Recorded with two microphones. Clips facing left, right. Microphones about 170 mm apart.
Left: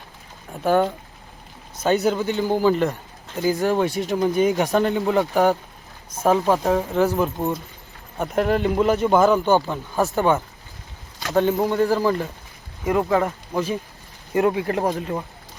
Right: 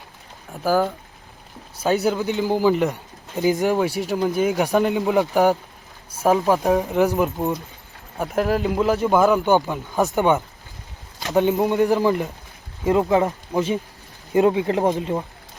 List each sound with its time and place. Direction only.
0.6 s speech: centre (ahead or behind)
6.7 s speech: 15° right (ahead or behind)
8.2 s a man's voice: centre (ahead or behind); by 15.1 s 25° right (ahead or behind)